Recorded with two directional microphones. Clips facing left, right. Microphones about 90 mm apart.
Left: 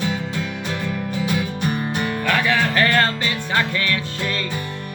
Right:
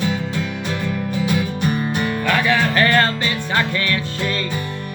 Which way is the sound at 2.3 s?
25° right (ahead or behind).